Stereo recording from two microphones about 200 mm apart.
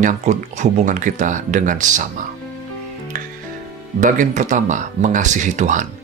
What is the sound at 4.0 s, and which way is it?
Speech, 40° right (ahead or behind).